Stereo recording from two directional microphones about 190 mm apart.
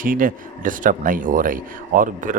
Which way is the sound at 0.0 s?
45° right (ahead or behind).